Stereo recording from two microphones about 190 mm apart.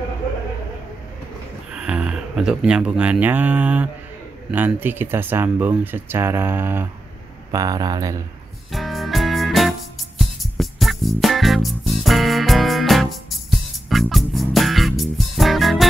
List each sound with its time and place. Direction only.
1.7 s speech: 5° right (ahead or behind)
8.7 s music: centre (ahead or behind)